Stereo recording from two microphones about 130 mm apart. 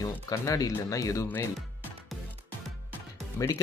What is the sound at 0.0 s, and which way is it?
Speech, 25° left (ahead or behind).